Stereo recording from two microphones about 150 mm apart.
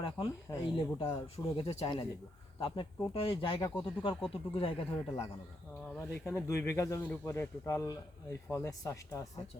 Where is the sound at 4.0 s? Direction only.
35° left (ahead or behind).